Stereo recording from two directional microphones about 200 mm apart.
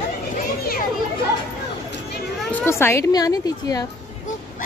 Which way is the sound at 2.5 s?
10° left (ahead or behind).